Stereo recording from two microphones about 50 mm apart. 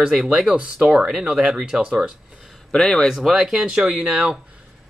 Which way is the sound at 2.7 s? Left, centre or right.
Centre.